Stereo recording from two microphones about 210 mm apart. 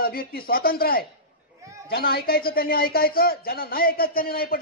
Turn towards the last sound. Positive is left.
turn(degrees=45)  # may be behind; listen again after turning